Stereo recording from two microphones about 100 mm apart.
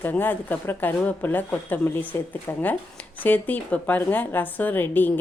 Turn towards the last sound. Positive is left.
turn(degrees=20)  # may be behind; listen again after turning